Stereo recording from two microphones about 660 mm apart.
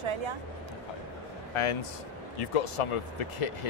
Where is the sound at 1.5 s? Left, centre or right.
Left.